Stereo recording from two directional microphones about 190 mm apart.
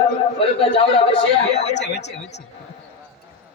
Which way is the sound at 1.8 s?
65° left (ahead or behind).